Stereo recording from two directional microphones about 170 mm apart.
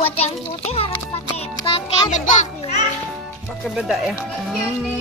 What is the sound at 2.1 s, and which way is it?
Speech, 45° left (ahead or behind).